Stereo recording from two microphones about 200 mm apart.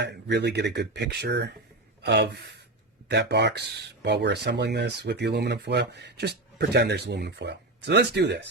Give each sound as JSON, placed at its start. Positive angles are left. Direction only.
{"t": 0.0, "sound": "speech", "side_deg": -60}